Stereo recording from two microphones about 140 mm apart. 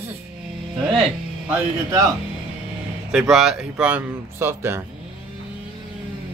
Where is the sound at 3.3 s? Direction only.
Centre (ahead or behind).